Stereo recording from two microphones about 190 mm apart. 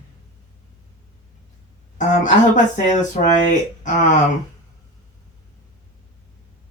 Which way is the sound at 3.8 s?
40° left (ahead or behind).